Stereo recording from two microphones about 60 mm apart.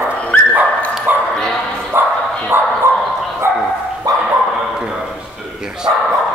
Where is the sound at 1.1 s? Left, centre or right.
Right.